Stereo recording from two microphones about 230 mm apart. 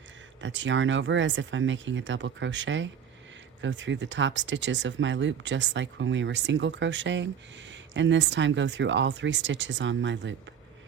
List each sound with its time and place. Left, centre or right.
0.4 s speech: right